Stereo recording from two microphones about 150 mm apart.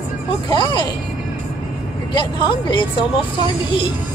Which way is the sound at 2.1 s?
35° left (ahead or behind).